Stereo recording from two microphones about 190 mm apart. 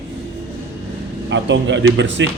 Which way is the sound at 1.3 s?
70° right (ahead or behind).